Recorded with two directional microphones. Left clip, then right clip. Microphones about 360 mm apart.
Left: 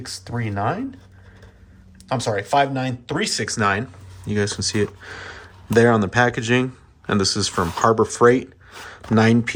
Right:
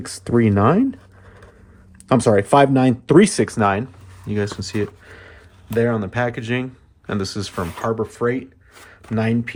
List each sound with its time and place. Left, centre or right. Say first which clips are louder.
0.0 s speech: right 11 dB; centre
2.0 s speech: right 7 dB; centre